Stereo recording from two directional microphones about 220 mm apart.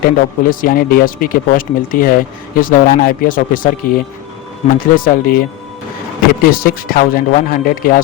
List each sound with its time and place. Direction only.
0.0 s speech: 40° left (ahead or behind)